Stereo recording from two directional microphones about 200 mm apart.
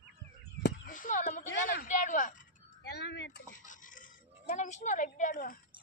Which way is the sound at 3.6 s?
40° left (ahead or behind).